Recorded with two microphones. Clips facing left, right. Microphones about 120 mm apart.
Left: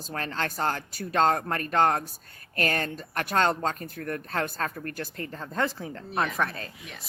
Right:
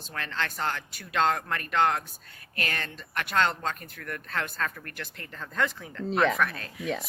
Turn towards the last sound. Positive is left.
turn(degrees=30)  # may be behind; listen again after turning